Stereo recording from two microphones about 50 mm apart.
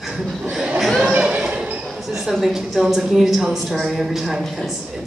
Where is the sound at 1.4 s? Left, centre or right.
Right.